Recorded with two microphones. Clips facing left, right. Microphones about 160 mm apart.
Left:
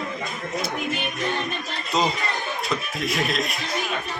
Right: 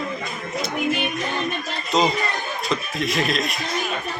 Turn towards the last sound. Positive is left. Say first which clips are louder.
# right 2 dB
turn(degrees=0)  # may be behind; listen again after turning